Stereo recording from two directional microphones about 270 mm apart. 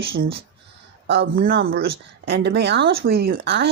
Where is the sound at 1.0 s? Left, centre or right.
Right.